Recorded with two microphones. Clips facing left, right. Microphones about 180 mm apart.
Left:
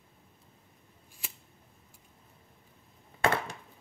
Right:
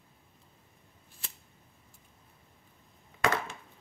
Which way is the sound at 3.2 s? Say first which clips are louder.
Left 1 dB; 30° left (ahead or behind).